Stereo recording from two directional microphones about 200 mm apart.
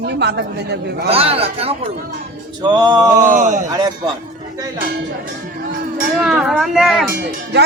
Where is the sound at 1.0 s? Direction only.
30° right (ahead or behind).